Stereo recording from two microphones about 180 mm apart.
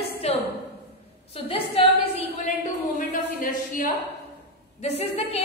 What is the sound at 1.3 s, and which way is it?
Speech, 35° left (ahead or behind).